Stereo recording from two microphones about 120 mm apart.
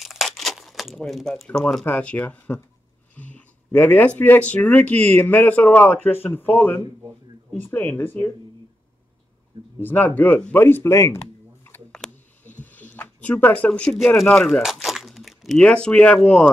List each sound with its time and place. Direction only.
0.0 s crumpling: centre (ahead or behind)
1.9 s speech: 10° left (ahead or behind)
9.8 s speech: 15° left (ahead or behind)
11.9 s a sound: 10° left (ahead or behind)
12.6 s speech: 15° left (ahead or behind)
14.2 s crumpling: 5° left (ahead or behind)
15.6 s speech: 10° left (ahead or behind)